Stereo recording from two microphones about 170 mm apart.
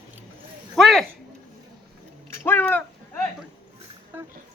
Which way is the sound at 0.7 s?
Centre (ahead or behind).